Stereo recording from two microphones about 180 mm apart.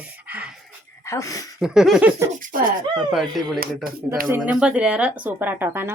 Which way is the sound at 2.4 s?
50° right (ahead or behind).